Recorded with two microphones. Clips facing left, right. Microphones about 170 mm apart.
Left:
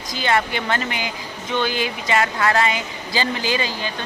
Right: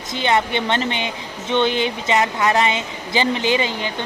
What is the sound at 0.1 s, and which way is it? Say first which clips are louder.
A woman's voice: right 2 dB; 20° right (ahead or behind).